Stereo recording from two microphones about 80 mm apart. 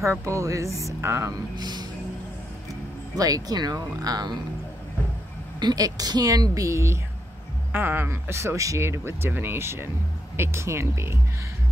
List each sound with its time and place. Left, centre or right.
0.0 s speech: right
1.6 s music: right
3.2 s a woman's voice: right
5.6 s a woman's voice: right
7.7 s speech: right